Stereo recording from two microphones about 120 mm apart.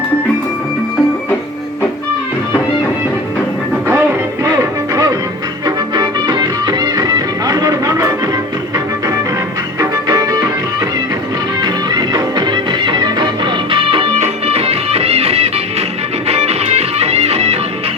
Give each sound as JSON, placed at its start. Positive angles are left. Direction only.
{"t": 4.4, "sound": "music", "side_deg": -30}
{"t": 14.2, "sound": "music", "side_deg": -55}